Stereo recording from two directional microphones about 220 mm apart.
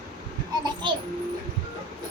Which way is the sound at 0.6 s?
20° right (ahead or behind).